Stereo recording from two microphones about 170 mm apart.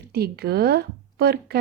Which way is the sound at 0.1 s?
70° right (ahead or behind).